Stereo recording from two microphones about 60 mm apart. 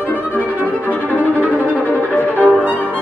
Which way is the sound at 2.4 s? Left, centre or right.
Right.